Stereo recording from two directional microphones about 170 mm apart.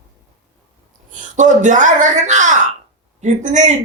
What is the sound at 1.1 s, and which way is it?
Speech, 45° right (ahead or behind).